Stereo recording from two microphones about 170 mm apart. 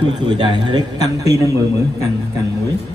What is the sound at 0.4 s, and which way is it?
A man's voice, 30° right (ahead or behind).